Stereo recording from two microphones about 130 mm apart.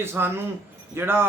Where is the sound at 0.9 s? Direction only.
15° right (ahead or behind).